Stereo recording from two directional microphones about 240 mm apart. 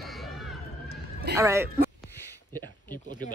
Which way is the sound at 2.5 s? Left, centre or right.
Centre.